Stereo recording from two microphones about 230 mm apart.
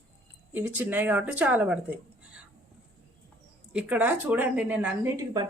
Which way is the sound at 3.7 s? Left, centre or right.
Centre.